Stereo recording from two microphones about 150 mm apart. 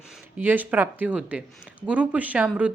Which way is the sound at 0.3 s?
10° right (ahead or behind).